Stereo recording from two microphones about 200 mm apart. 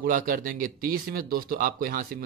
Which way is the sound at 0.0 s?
45° right (ahead or behind).